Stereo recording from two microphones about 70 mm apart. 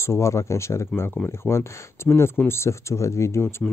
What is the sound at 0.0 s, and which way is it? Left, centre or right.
Speech, left.